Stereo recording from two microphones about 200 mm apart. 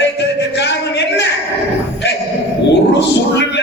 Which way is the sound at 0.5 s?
60° left (ahead or behind).